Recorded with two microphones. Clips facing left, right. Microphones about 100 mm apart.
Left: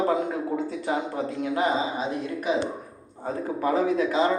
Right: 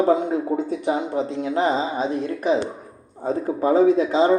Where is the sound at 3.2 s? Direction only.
25° right (ahead or behind).